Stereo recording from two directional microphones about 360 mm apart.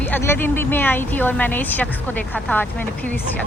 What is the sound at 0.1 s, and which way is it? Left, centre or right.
Speech, centre.